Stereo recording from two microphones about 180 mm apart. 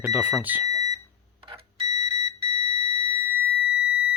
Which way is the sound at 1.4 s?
30° right (ahead or behind).